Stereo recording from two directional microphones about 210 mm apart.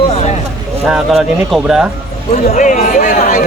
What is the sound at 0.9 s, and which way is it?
Speech, centre (ahead or behind).